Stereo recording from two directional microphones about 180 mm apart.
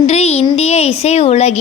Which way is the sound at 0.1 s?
35° left (ahead or behind).